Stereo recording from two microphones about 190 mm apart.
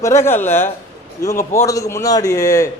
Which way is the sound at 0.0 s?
15° left (ahead or behind).